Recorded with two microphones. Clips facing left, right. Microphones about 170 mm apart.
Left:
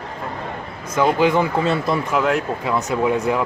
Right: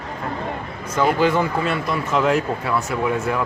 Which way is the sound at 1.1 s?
15° left (ahead or behind).